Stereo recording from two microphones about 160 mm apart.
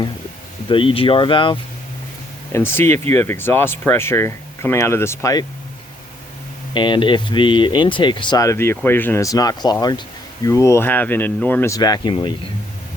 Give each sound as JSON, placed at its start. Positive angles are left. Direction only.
{"t": 0.7, "sound": "speech", "side_deg": 35}
{"t": 2.5, "sound": "speech", "side_deg": 15}
{"t": 6.7, "sound": "speech", "side_deg": 30}
{"t": 11.8, "sound": "speech", "side_deg": 25}